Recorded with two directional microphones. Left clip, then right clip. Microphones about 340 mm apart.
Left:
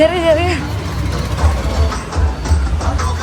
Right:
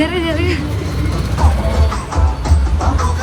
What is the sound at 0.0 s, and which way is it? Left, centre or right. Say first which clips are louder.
Vehicle: left 6 dB; centre.